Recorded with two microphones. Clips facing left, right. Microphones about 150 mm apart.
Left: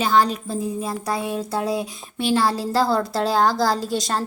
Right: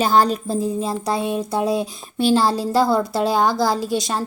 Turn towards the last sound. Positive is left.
turn(degrees=-10)  # may be behind; listen again after turning